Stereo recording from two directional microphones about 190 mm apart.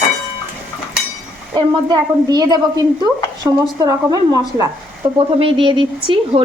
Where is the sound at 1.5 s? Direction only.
20° right (ahead or behind).